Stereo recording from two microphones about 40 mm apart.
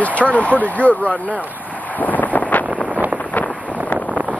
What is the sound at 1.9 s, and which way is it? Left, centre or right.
Wind noise, left.